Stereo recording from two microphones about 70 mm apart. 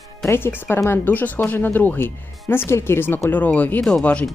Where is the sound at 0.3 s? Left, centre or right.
Left.